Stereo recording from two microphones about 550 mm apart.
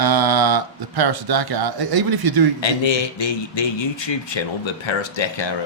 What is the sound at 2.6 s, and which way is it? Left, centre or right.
A man's voice, left.